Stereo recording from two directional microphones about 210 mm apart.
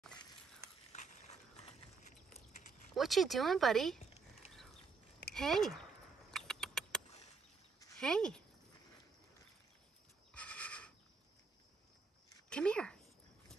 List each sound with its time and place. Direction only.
0.9 s horse: 35° left (ahead or behind)
2.9 s speech: centre (ahead or behind)
5.3 s speech: centre (ahead or behind)
6.3 s rodents: 5° left (ahead or behind)
8.0 s speech: 5° left (ahead or behind)
10.3 s pulleys: 5° left (ahead or behind)
12.4 s a sound: 5° left (ahead or behind)